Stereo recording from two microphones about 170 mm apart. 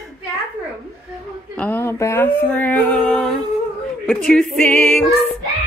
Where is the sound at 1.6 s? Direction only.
10° left (ahead or behind).